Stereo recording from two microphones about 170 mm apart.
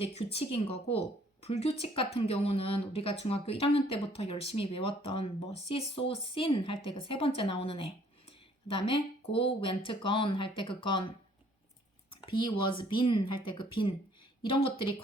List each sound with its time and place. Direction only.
0.0 s speech: 35° left (ahead or behind)
8.3 s a sound: 30° left (ahead or behind)
9.6 s speech: 30° left (ahead or behind)
12.1 s speech: 30° left (ahead or behind)